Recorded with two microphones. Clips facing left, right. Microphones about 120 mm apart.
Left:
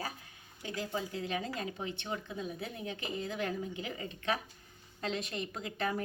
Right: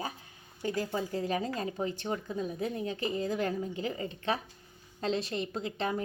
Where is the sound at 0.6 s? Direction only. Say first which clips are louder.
Right 5 dB; 45° right (ahead or behind).